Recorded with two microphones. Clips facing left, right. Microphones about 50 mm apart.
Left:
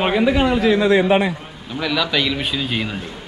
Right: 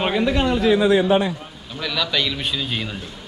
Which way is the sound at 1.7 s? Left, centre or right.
Centre.